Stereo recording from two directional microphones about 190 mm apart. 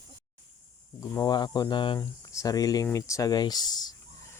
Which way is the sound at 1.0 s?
15° left (ahead or behind).